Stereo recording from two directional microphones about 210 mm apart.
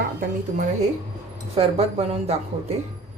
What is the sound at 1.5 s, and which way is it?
Speech, 30° right (ahead or behind).